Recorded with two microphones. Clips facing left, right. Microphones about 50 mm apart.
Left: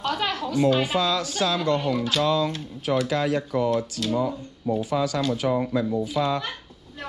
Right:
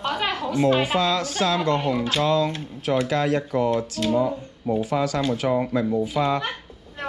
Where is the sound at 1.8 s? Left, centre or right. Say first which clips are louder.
Right 1 dB; right.